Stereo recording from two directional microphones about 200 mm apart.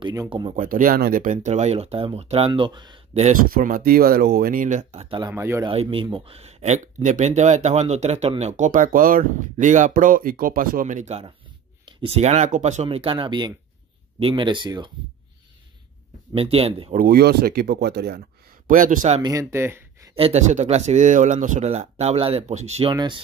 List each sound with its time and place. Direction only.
0.0 s speech: 20° right (ahead or behind)
0.6 s speech: 45° right (ahead or behind); by 3.0 s 20° right (ahead or behind)
3.2 s speech: 40° right (ahead or behind)
5.3 s speech: 15° right (ahead or behind)
5.7 s speech: 25° right (ahead or behind)
16.3 s speech: 30° right (ahead or behind)
16.9 s speech: 45° right (ahead or behind)
18.7 s speech: 40° right (ahead or behind)
19.2 s speech: 15° right (ahead or behind)
20.2 s speech: 30° right (ahead or behind)